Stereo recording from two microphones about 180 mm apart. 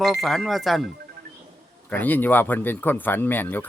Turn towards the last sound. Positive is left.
turn(degrees=10)  # may be behind; listen again after turning